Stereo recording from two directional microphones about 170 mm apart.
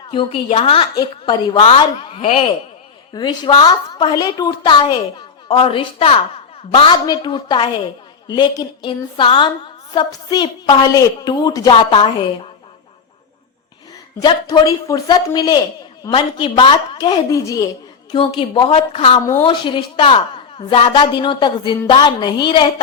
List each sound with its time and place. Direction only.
0.1 s a woman's voice: 30° left (ahead or behind)
14.2 s a woman's voice: 25° left (ahead or behind)